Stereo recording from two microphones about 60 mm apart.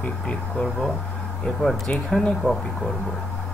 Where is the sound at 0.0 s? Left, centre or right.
Centre.